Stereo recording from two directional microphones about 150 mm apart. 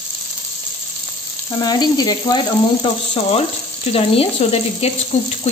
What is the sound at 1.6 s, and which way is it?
Speech, 25° left (ahead or behind).